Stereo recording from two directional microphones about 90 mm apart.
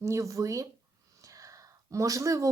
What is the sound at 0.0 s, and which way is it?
A woman's voice, 35° right (ahead or behind).